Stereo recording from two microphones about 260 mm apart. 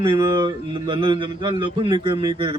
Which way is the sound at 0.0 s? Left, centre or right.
Centre.